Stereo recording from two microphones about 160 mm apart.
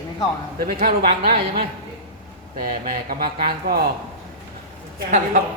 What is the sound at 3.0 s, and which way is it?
Speech, 65° right (ahead or behind).